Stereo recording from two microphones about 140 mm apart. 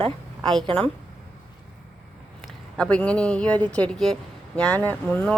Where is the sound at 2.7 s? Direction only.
5° left (ahead or behind).